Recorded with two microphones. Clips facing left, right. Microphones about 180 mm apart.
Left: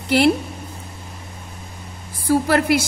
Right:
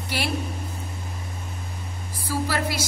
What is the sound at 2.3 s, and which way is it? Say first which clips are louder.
Speech: left 10 dB; 60° left (ahead or behind).